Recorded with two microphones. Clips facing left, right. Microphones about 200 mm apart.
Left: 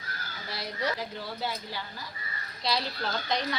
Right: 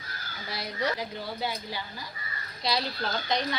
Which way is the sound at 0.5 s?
Centre (ahead or behind).